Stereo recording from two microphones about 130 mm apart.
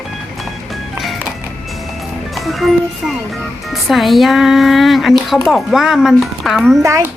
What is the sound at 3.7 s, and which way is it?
Speech, centre (ahead or behind).